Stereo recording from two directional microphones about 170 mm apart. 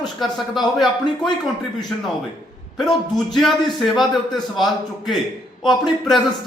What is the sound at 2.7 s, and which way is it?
A man's voice, centre (ahead or behind).